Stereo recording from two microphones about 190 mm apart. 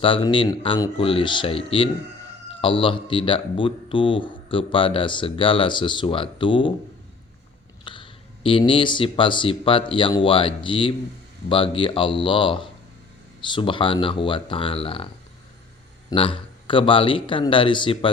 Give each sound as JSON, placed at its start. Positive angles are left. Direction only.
{"t": 0.0, "sound": "speech", "side_deg": 25}
{"t": 7.9, "sound": "speech", "side_deg": 25}
{"t": 16.0, "sound": "speech", "side_deg": 25}